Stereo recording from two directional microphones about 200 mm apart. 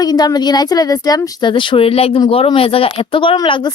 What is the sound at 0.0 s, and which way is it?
Speech, 20° left (ahead or behind).